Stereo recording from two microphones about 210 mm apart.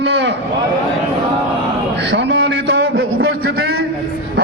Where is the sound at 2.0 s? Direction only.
55° right (ahead or behind).